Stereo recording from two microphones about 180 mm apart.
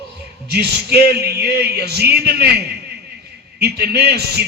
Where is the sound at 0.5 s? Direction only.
65° right (ahead or behind).